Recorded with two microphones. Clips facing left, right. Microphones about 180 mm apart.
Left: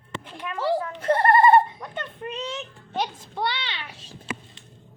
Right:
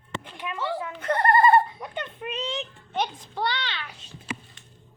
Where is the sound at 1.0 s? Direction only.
30° left (ahead or behind).